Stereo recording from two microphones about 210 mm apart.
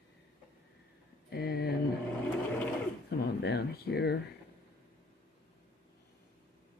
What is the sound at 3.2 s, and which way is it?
Speech, 50° left (ahead or behind).